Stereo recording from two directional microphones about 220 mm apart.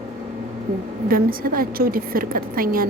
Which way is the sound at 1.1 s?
40° right (ahead or behind).